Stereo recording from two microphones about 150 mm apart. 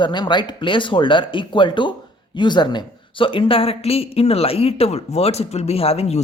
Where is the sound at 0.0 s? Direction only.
30° left (ahead or behind).